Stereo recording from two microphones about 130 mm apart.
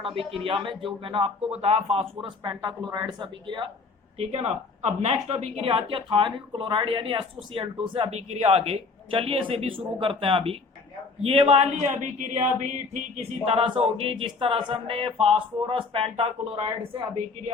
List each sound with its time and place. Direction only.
0.0 s speech: 45° right (ahead or behind)
4.2 s speech: 50° right (ahead or behind)
11.9 s a sound: 70° right (ahead or behind)
13.5 s speech: 50° right (ahead or behind)